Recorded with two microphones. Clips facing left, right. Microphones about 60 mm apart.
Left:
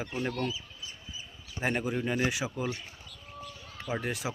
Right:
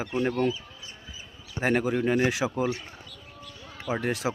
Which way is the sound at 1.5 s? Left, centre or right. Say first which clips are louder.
Right 6 dB; right.